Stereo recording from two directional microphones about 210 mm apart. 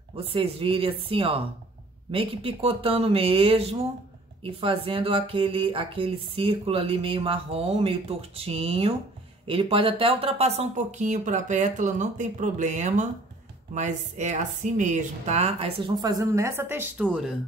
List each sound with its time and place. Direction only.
0.1 s speech: 25° right (ahead or behind); by 17.4 s 5° right (ahead or behind)